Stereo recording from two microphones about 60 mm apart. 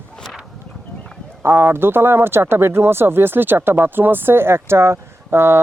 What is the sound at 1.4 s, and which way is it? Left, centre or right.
Speech, right.